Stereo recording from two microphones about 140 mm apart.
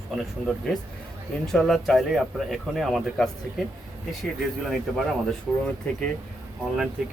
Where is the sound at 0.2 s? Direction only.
5° left (ahead or behind).